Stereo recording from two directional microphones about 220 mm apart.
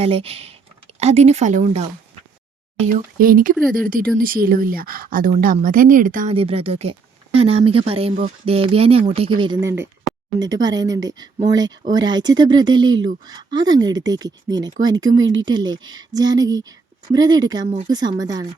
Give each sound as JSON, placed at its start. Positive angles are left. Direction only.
{"t": 0.0, "sound": "a woman's voice", "side_deg": -25}
{"t": 6.3, "sound": "speech", "side_deg": -25}